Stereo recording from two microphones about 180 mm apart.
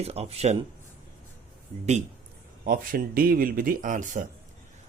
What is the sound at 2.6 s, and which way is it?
Speech, 50° right (ahead or behind).